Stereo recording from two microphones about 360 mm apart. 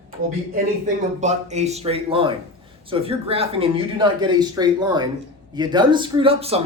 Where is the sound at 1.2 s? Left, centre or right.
Centre.